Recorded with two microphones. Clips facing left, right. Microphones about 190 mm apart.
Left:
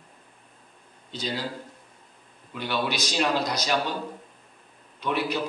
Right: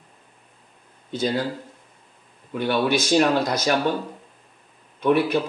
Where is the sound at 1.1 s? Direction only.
50° right (ahead or behind).